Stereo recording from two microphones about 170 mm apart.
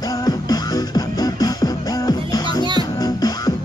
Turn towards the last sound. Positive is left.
turn(degrees=25)  # may be behind; listen again after turning